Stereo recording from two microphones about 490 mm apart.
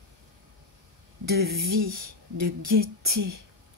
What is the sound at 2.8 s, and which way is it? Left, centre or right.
Speech, right.